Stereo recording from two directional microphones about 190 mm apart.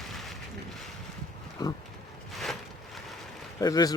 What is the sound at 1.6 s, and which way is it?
Pig, 20° left (ahead or behind).